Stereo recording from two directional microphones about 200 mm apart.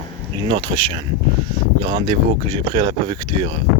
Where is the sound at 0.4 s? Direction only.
25° right (ahead or behind).